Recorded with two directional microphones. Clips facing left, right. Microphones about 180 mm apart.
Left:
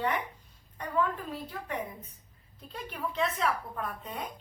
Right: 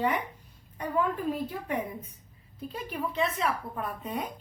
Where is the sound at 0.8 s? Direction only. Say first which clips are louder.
Right 2 dB; 10° right (ahead or behind).